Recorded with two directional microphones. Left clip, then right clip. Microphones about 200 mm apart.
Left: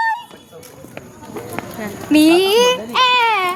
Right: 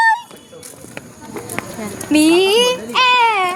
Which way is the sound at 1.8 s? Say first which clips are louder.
Left 1 dB; centre (ahead or behind).